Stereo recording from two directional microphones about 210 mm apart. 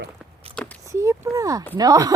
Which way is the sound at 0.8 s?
15° right (ahead or behind).